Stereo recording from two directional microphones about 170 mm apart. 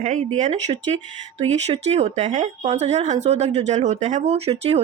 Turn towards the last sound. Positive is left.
turn(degrees=-40)  # may be behind; listen again after turning